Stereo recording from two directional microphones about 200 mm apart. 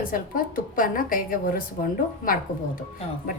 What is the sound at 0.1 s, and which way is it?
A woman's voice, 45° left (ahead or behind).